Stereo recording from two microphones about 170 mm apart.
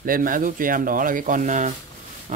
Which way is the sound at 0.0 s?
55° right (ahead or behind).